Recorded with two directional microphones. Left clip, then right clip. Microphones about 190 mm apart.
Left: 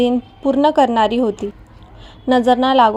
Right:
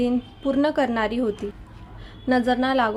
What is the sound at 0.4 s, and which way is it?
A woman's voice, 20° left (ahead or behind).